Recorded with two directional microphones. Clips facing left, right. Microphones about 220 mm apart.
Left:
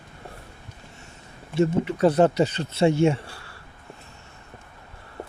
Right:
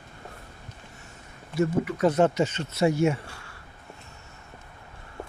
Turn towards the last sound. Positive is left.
turn(degrees=30)  # may be behind; listen again after turning